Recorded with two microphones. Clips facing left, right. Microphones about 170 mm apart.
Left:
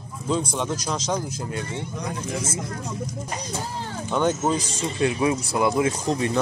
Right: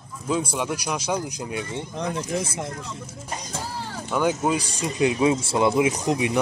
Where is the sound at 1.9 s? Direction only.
60° right (ahead or behind).